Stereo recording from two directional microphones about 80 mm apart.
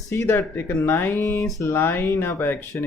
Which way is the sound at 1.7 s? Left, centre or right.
Left.